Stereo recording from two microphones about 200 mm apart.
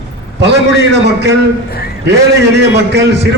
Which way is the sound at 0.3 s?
60° right (ahead or behind).